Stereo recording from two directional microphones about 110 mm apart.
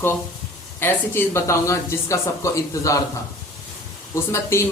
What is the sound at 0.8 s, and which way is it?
Speech, 20° left (ahead or behind).